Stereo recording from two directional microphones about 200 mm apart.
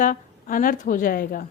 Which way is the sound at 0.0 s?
40° left (ahead or behind).